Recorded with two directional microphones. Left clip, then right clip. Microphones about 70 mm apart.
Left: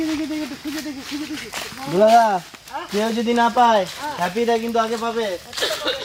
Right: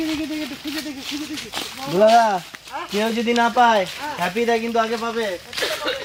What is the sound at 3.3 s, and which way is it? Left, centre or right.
Speech, centre.